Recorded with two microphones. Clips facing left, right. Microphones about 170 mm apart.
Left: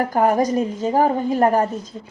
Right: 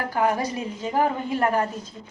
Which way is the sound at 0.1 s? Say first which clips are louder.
Left 3 dB; 45° left (ahead or behind).